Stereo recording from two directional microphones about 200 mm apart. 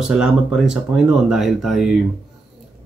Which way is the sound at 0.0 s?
Centre (ahead or behind).